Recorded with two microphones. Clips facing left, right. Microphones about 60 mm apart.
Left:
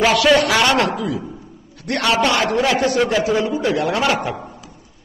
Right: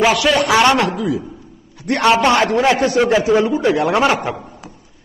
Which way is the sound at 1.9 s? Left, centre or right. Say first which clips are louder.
Right 4 dB; right.